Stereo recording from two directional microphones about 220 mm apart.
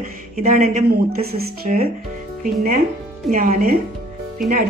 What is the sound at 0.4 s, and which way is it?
A woman's voice, 35° right (ahead or behind).